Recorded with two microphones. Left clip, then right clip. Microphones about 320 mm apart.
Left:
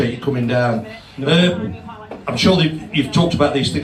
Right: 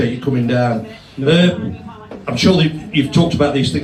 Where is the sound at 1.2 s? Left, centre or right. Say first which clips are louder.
Right 2 dB; centre.